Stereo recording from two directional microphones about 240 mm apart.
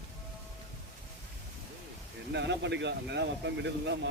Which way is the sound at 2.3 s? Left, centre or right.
Right.